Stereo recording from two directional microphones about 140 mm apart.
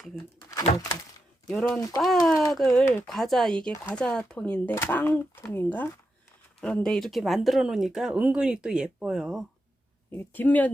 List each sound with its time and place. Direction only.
0.7 s a sound: 65° left (ahead or behind)
1.5 s speech: 5° left (ahead or behind)
10.1 s speech: 15° left (ahead or behind)